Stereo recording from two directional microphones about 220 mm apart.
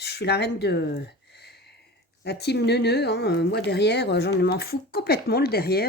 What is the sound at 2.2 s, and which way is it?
Speech, 50° left (ahead or behind).